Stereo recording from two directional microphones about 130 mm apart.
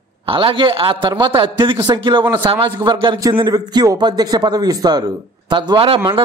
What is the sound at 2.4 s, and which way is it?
A man's voice, 45° right (ahead or behind).